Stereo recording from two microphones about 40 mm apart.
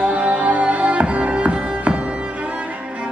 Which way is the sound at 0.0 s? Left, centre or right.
Right.